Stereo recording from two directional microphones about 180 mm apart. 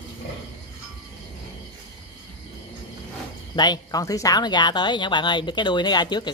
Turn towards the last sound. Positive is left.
turn(degrees=25)  # may be behind; listen again after turning